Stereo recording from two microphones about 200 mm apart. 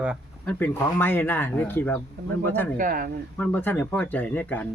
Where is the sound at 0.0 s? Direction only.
5° right (ahead or behind).